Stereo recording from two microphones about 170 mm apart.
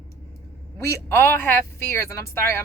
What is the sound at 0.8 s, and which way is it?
Speech, 15° left (ahead or behind).